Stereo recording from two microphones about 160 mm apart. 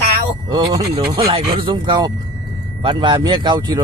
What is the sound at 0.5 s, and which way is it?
Speech, 25° right (ahead or behind).